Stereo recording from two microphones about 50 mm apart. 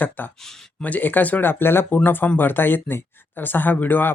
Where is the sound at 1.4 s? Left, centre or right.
Left.